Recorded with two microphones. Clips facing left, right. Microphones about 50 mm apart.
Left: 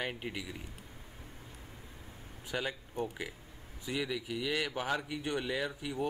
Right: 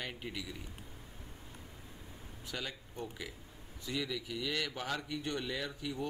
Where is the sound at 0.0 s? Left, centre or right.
Left.